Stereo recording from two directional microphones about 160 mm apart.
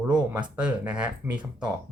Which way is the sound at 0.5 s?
5° right (ahead or behind).